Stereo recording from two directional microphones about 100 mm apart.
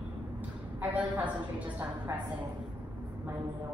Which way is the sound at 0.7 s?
15° right (ahead or behind).